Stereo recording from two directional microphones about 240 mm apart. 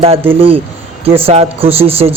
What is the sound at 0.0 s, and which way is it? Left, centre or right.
Speech, right.